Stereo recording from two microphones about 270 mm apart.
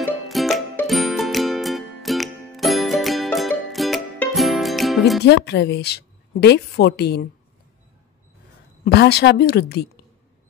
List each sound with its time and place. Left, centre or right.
0.3 s music: centre
5.2 s a woman's voice: left
8.8 s a woman's voice: left